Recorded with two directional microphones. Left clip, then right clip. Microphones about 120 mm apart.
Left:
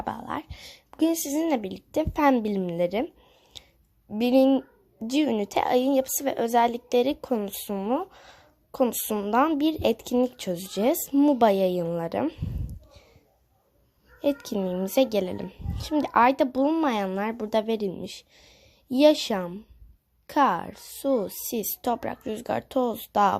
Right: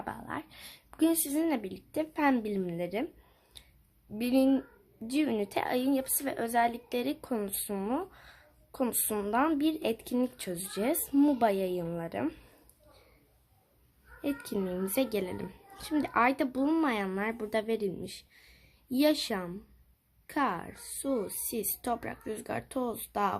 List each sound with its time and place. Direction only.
0.0 s a child's voice: 45° left (ahead or behind)
3.5 s a sound: 45° left (ahead or behind)
4.2 s a child's voice: 45° left (ahead or behind)
11.1 s a woman's voice: 30° left (ahead or behind)
11.3 s a child's voice: 50° left (ahead or behind)
14.2 s a child's voice: 45° left (ahead or behind)